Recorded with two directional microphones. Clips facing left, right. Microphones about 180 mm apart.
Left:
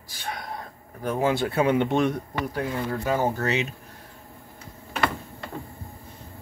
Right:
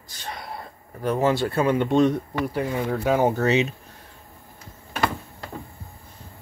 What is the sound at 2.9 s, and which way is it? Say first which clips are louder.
Speech: right 5 dB; 15° right (ahead or behind).